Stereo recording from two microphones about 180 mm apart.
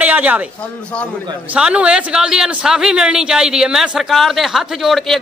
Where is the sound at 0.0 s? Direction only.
10° right (ahead or behind).